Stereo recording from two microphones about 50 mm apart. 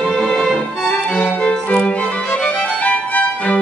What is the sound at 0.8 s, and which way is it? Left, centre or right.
Music, left.